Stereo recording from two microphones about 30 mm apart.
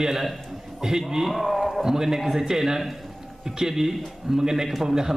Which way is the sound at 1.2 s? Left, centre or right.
Centre.